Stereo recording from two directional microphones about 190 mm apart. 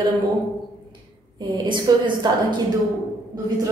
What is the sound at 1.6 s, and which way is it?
Speech, 25° right (ahead or behind).